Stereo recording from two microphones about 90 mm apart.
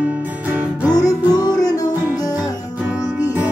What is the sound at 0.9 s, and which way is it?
Music, 45° left (ahead or behind).